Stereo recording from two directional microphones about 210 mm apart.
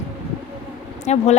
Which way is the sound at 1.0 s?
30° left (ahead or behind).